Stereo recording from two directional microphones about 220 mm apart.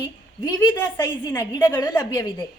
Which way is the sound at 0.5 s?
10° left (ahead or behind).